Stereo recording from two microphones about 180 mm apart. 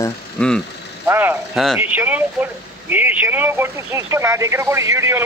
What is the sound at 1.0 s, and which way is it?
Speech, 10° right (ahead or behind).